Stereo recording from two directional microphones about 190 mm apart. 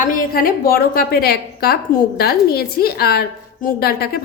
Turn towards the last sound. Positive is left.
turn(degrees=55)  # may be behind; listen again after turning